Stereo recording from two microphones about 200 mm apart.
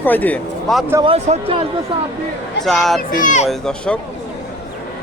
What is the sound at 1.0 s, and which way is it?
Speech, 30° right (ahead or behind).